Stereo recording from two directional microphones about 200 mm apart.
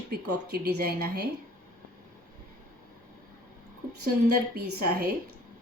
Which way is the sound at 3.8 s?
45° right (ahead or behind).